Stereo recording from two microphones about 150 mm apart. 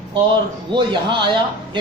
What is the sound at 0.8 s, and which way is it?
Speech, 30° right (ahead or behind).